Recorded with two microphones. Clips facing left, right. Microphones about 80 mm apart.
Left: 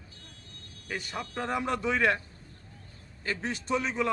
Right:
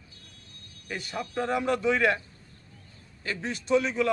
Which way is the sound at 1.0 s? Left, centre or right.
Left.